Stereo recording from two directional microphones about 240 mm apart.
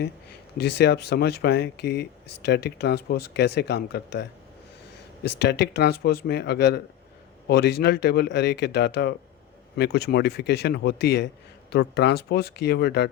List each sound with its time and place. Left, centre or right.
0.0 s speech: left
5.4 s speech: left